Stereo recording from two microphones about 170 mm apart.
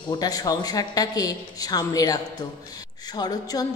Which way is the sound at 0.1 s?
20° left (ahead or behind).